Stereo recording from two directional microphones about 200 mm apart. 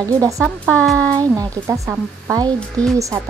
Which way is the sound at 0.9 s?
15° right (ahead or behind).